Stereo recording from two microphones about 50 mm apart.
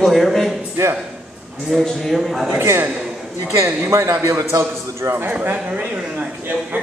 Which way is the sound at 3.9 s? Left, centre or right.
Right.